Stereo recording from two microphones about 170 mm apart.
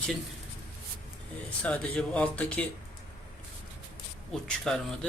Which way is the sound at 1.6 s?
5° left (ahead or behind).